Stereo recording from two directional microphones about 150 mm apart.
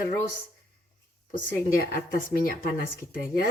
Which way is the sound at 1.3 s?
70° left (ahead or behind).